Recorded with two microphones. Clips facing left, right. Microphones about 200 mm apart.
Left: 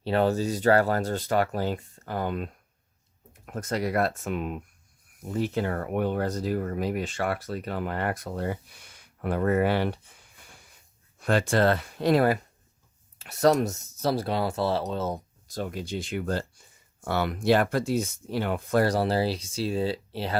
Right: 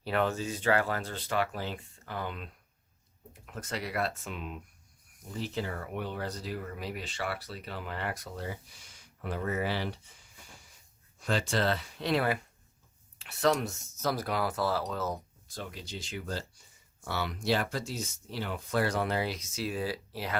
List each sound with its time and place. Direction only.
0.0 s speech: 30° left (ahead or behind); by 10.2 s 55° left (ahead or behind)
11.2 s speech: 60° left (ahead or behind); by 15.2 s 25° left (ahead or behind)
15.4 s speech: 45° left (ahead or behind)